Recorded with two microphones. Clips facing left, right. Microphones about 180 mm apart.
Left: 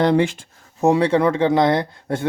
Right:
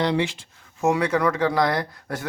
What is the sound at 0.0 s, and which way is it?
Speech, 50° left (ahead or behind).